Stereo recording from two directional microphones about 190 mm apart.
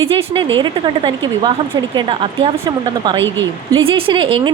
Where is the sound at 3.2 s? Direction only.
85° right.